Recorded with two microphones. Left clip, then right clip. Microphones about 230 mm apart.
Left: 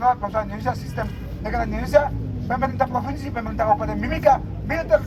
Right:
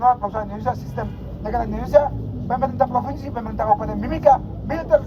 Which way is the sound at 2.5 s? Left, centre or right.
Left.